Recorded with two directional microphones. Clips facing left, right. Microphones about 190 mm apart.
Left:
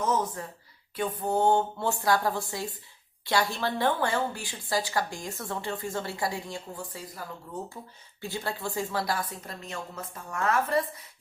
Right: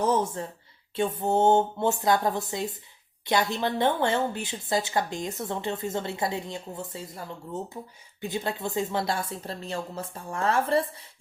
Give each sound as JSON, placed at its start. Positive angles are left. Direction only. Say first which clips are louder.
{"t": 0.0, "sound": "a woman's voice", "louder": "right 3 dB", "side_deg": -30}